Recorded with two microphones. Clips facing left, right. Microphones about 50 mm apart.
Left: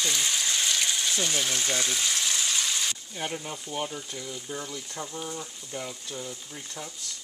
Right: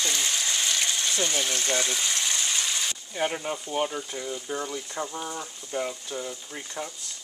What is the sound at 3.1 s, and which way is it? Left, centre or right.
Speech, right.